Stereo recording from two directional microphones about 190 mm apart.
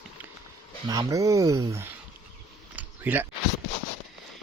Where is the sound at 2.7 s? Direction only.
10° right (ahead or behind).